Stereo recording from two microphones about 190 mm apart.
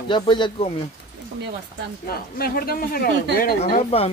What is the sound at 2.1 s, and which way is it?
Speech, 55° left (ahead or behind).